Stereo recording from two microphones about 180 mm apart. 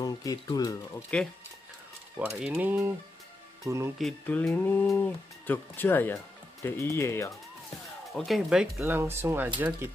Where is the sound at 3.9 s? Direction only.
5° left (ahead or behind).